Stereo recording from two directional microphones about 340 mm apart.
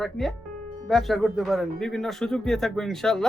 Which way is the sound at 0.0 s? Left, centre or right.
Centre.